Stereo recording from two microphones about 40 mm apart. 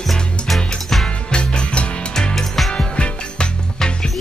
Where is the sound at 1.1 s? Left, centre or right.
Left.